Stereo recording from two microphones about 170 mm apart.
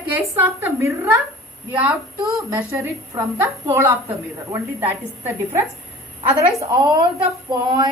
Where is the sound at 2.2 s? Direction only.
20° right (ahead or behind).